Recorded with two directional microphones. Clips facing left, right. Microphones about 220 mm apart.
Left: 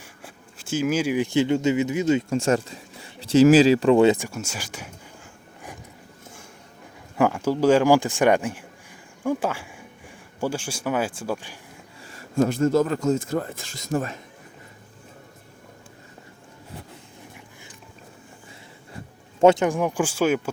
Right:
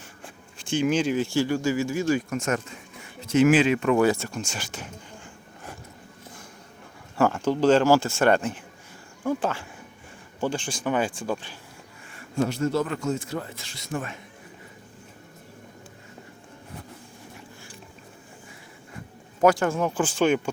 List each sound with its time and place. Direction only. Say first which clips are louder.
0.0 s speech: even; 5° left (ahead or behind)
4.3 s a sound: even; 5° left (ahead or behind)
7.2 s a man's voice: left 1 dB; 10° left (ahead or behind)
12.1 s a man's voice: left 4 dB; 45° left (ahead or behind)
19.4 s a man's voice: left 3 dB; 25° left (ahead or behind); by 20.5 s 5° left (ahead or behind)